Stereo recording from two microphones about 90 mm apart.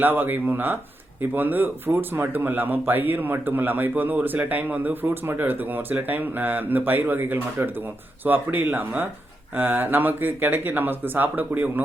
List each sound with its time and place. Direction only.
0.0 s speech: 20° right (ahead or behind)